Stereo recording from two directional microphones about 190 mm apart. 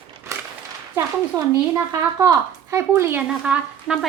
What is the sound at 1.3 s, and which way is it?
A woman's voice, 20° right (ahead or behind).